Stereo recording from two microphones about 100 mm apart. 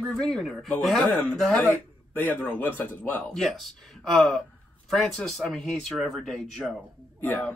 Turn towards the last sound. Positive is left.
turn(degrees=15)  # may be behind; listen again after turning